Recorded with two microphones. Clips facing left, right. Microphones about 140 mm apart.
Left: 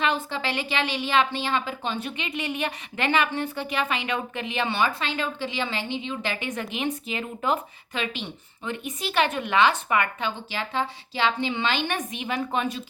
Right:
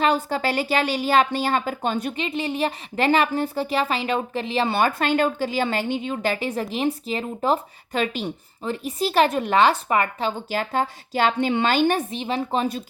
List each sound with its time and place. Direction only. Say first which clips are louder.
0.0 s a woman's voice: right 5 dB; 40° right (ahead or behind)